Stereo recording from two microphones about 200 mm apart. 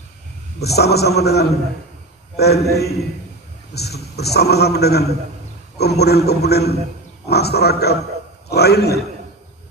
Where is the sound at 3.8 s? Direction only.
55° left (ahead or behind).